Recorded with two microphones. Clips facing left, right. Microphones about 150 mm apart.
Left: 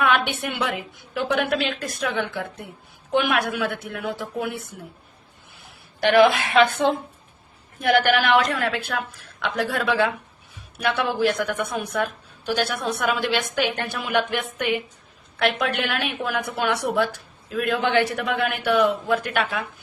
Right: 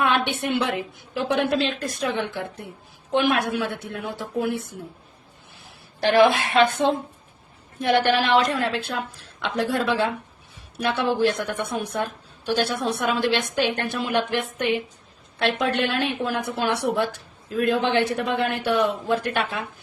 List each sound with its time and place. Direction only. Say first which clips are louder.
0.0 s a woman's voice: even; 30° right (ahead or behind)
6.0 s a woman's voice: left 1 dB; 30° right (ahead or behind)
7.8 s a woman's voice: left 1 dB; 30° right (ahead or behind)